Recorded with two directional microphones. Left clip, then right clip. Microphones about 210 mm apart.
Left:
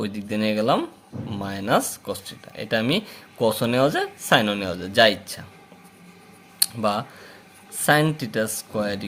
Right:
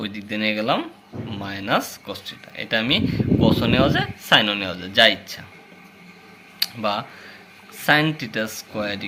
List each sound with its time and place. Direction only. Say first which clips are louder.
0.0 s speech: right 1 dB; 50° left (ahead or behind)
6.6 s a sound: even; 50° left (ahead or behind)
7.8 s speech: right 1 dB; 50° left (ahead or behind)